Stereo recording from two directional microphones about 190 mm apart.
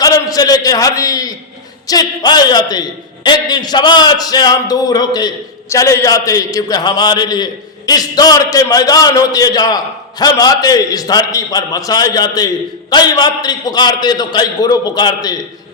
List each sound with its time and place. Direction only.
0.0 s a man's voice: 20° left (ahead or behind)